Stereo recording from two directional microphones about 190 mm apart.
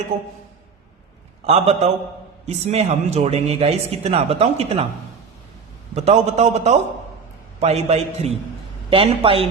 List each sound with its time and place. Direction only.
1.5 s speech: 35° right (ahead or behind)
5.9 s a woman's voice: 35° right (ahead or behind)